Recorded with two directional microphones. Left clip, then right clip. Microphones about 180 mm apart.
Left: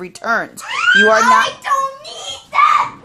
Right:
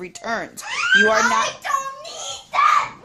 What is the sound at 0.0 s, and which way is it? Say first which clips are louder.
A woman's voice: left 8 dB; 10° left (ahead or behind).